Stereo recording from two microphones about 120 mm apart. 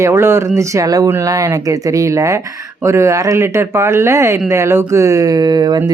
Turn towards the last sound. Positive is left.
turn(degrees=-35)  # may be behind; listen again after turning